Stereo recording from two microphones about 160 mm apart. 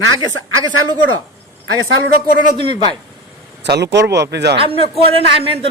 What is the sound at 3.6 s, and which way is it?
Speech, 90° right.